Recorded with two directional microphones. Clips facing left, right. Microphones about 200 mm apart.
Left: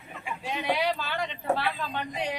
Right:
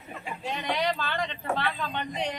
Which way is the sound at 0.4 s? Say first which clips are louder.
Left 1 dB; 5° left (ahead or behind).